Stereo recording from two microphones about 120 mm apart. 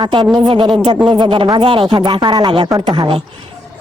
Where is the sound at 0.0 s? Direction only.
40° right (ahead or behind).